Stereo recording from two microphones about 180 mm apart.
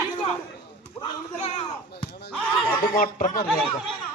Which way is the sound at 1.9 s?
65° left (ahead or behind).